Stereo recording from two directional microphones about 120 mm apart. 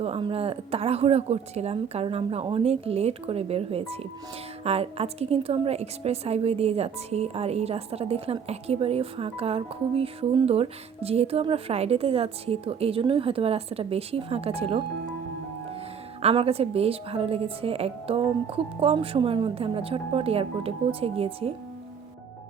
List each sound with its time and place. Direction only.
0.0 s a woman's voice: 50° right (ahead or behind)
16.2 s a woman's voice: 55° right (ahead or behind)